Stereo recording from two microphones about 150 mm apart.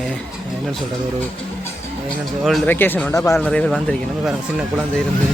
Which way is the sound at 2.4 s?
Centre (ahead or behind).